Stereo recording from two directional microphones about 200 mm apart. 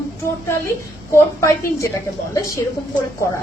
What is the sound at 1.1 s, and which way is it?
A woman's voice, 15° left (ahead or behind).